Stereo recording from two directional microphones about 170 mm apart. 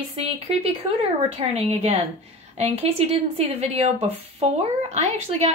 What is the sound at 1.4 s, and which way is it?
A woman's voice, 40° right (ahead or behind).